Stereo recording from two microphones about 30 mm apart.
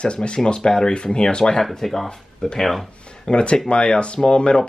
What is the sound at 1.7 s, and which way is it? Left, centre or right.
Speech, centre.